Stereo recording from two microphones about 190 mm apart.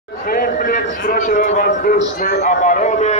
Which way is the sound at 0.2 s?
50° left (ahead or behind).